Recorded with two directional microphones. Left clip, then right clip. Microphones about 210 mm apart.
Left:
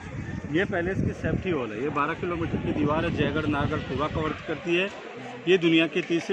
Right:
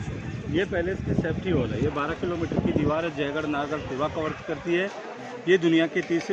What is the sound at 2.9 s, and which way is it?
Speech, 30° left (ahead or behind).